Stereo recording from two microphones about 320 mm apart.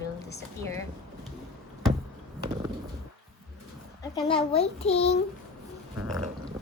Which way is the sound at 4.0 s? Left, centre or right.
Centre.